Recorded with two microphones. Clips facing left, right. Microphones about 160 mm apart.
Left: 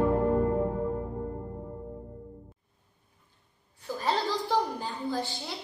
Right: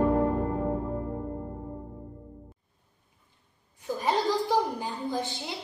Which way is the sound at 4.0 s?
15° right (ahead or behind).